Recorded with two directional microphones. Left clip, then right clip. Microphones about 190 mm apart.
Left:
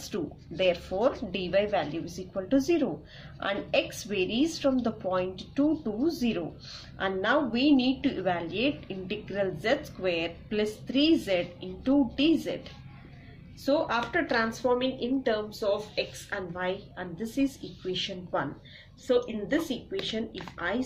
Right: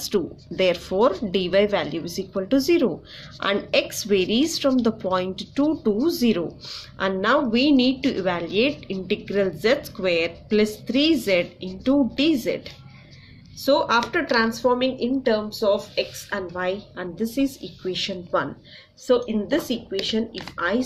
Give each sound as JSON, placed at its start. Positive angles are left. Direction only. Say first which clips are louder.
{"t": 0.0, "sound": "a woman's voice", "louder": "right 10 dB", "side_deg": -40}
{"t": 13.6, "sound": "a woman's voice", "louder": "right 8 dB", "side_deg": -35}